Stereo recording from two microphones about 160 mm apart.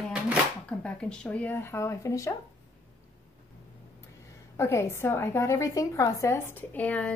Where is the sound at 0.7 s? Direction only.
5° left (ahead or behind).